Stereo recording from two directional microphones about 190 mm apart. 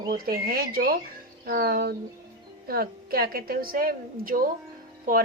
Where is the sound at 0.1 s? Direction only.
50° right (ahead or behind).